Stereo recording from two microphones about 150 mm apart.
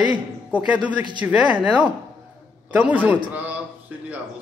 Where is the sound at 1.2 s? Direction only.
15° right (ahead or behind).